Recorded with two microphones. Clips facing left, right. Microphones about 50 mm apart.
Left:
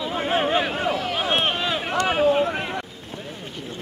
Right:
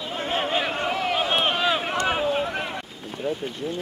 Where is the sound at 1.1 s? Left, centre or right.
Centre.